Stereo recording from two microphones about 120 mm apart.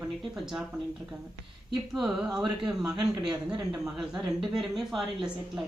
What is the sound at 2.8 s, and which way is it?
Speech, 30° right (ahead or behind).